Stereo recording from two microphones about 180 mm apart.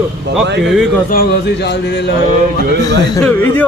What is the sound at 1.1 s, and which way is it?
Speech, 65° left (ahead or behind).